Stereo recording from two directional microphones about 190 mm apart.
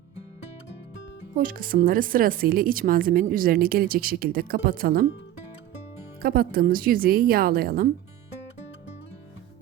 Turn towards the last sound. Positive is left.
turn(degrees=-50)  # may be behind; listen again after turning